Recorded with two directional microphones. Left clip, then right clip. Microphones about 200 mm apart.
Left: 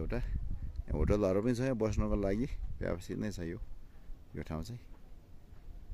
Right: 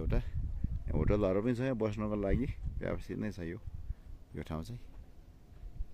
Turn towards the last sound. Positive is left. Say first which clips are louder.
# even
turn(degrees=5)  # may be behind; listen again after turning